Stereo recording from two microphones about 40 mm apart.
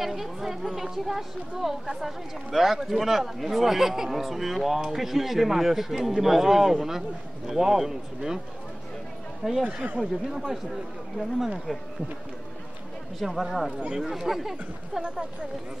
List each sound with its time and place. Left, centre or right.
0.0 s speech: centre
9.6 s speech: right
10.3 s speech: centre
13.2 s speech: centre
15.0 s speech: right